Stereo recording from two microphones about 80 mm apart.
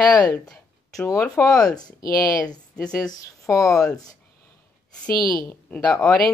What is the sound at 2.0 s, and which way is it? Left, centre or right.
Speech, left.